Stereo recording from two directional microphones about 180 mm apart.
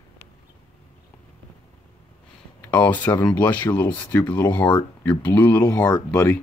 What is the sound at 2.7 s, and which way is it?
Speech, 10° left (ahead or behind).